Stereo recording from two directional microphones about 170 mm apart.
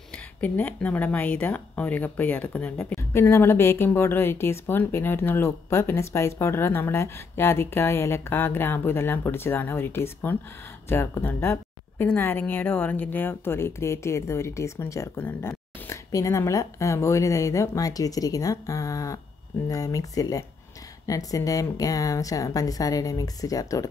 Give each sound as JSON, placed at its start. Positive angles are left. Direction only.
{"t": 0.1, "sound": "speech", "side_deg": 10}